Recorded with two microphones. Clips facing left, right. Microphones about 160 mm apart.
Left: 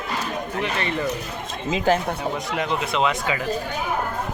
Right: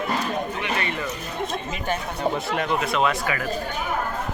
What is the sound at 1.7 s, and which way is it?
Speech, 90° left.